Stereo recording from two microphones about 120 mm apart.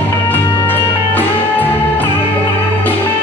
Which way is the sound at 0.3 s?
15° left (ahead or behind).